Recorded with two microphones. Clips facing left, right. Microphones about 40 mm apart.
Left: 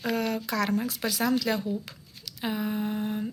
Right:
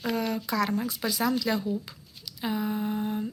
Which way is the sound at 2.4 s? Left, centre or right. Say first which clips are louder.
Right 1 dB; left.